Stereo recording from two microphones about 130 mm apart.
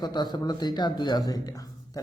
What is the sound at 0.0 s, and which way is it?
A man's voice, 35° left (ahead or behind).